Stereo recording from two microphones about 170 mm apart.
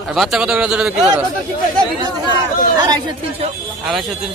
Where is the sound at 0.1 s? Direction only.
Centre (ahead or behind).